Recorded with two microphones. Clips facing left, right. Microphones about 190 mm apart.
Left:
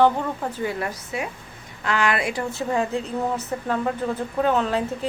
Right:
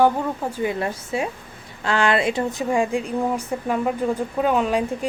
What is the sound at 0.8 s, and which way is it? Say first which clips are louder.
A woman's voice: right 4 dB; 25° right (ahead or behind).